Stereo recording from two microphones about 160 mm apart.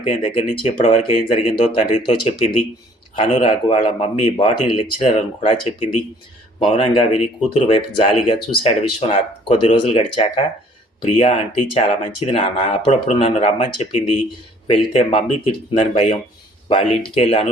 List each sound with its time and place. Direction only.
0.0 s speech: 35° left (ahead or behind)